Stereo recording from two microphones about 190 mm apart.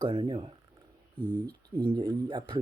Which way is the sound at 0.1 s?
30° right (ahead or behind).